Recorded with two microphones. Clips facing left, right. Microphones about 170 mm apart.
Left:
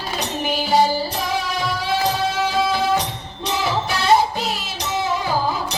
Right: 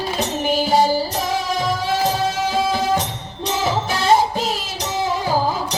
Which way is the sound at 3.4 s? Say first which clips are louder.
Right 1 dB; 40° right (ahead or behind).